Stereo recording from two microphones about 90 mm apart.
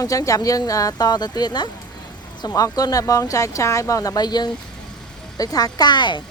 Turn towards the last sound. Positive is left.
turn(degrees=60)  # may be behind; listen again after turning